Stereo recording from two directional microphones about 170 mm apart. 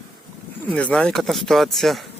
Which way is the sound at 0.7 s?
10° left (ahead or behind).